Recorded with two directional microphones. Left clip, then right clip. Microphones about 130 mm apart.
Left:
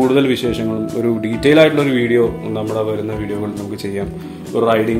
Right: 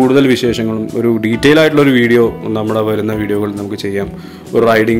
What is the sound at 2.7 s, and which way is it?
Speech, 45° right (ahead or behind).